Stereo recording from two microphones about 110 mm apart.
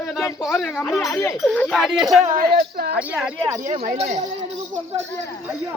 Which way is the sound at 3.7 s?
80° right.